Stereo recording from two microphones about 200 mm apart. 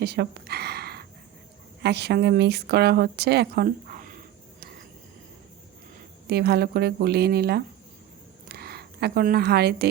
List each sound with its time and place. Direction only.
0.0 s a sound: 55° right (ahead or behind)
1.8 s a woman's voice: 55° right (ahead or behind)
6.2 s speech: 55° right (ahead or behind)